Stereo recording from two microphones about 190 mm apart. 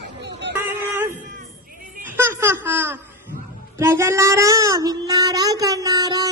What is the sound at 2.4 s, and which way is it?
Babbling, 10° right (ahead or behind).